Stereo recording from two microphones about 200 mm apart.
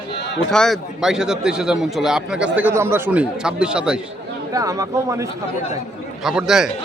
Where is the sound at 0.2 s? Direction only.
60° left (ahead or behind).